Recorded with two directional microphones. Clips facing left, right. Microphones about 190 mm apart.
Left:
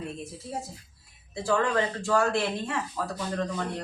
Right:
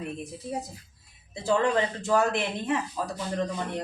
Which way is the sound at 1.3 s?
20° right (ahead or behind).